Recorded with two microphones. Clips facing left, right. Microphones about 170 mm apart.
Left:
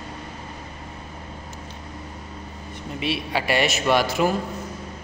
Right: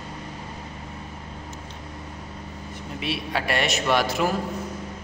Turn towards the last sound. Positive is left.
turn(degrees=0)  # may be behind; listen again after turning